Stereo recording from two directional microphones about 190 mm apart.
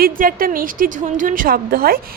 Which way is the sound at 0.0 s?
45° right (ahead or behind).